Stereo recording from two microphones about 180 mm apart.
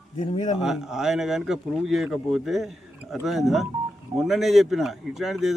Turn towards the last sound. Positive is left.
turn(degrees=0)  # may be behind; listen again after turning